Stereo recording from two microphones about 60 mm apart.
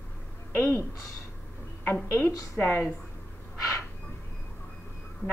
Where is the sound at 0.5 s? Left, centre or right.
Left.